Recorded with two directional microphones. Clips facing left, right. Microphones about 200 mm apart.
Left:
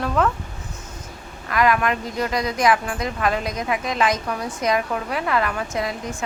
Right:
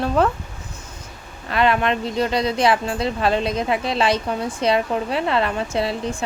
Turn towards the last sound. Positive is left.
turn(degrees=-30)  # may be behind; listen again after turning